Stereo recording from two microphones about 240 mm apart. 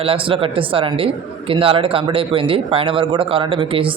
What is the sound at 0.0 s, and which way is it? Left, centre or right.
A man's voice, right.